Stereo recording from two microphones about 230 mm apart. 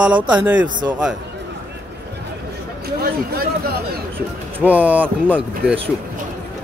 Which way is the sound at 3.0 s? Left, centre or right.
Right.